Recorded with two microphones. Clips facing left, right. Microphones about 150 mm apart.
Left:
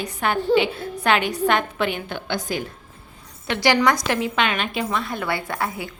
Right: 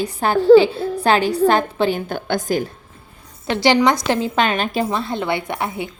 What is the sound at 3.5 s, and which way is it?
A woman's voice, 25° right (ahead or behind).